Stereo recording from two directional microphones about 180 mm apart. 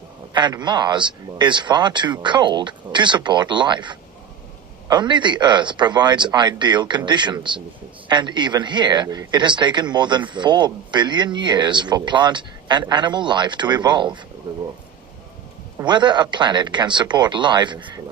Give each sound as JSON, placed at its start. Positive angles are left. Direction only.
{"t": 0.3, "sound": "speech", "side_deg": -25}
{"t": 15.9, "sound": "speech", "side_deg": -25}